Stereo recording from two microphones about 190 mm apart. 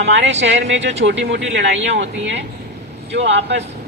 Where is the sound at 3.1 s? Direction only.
70° right (ahead or behind).